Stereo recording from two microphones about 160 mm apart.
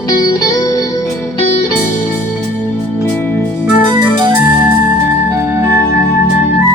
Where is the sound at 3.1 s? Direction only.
10° left (ahead or behind).